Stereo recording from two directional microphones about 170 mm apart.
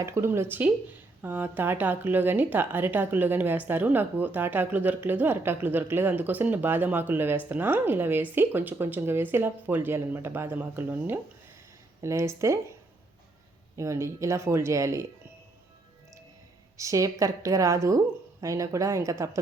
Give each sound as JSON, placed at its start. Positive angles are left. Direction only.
{"t": 0.0, "sound": "a woman's voice", "side_deg": -15}
{"t": 13.7, "sound": "a woman's voice", "side_deg": -15}
{"t": 16.7, "sound": "a woman's voice", "side_deg": -20}